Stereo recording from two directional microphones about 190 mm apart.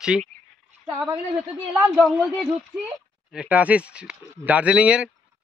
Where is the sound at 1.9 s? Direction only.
5° left (ahead or behind).